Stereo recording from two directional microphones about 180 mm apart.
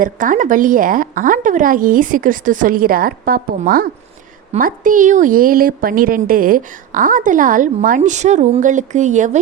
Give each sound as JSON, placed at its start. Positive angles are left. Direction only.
{"t": 0.0, "sound": "a woman's voice", "side_deg": -45}